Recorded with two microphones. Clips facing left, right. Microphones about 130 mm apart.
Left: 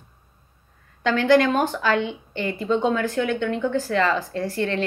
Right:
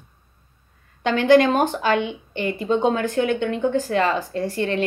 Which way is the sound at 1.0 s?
20° right (ahead or behind).